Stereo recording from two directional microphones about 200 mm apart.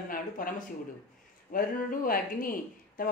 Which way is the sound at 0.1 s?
45° left (ahead or behind).